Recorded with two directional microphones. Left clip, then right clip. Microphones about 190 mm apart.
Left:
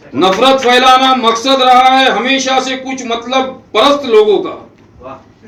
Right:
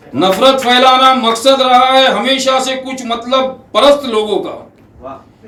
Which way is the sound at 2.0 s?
25° right (ahead or behind).